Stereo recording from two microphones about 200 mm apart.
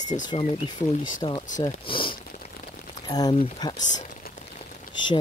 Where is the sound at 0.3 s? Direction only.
30° left (ahead or behind).